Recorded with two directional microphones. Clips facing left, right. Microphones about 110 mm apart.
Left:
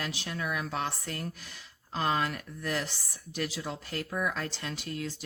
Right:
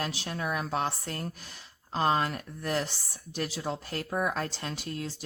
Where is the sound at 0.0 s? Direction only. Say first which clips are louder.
Right 2 dB; 35° right (ahead or behind).